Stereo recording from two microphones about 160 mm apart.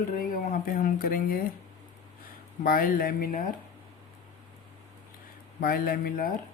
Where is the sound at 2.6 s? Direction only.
60° left (ahead or behind).